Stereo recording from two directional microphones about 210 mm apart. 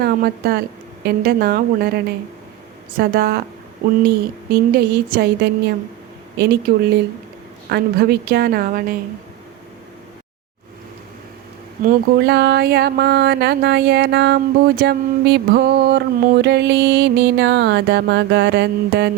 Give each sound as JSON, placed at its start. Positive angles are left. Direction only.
{"t": 0.0, "sound": "speech", "side_deg": -45}
{"t": 3.0, "sound": "speech", "side_deg": -45}
{"t": 11.9, "sound": "speech", "side_deg": -50}